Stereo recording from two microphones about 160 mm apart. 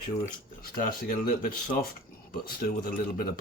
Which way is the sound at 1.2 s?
60° left (ahead or behind).